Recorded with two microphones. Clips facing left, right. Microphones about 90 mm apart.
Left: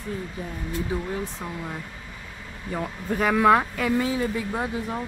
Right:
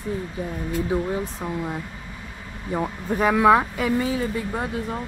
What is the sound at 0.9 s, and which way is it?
Speech, 20° right (ahead or behind).